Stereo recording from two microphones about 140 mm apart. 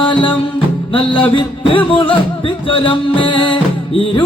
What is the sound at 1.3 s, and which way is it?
Music, 40° left (ahead or behind).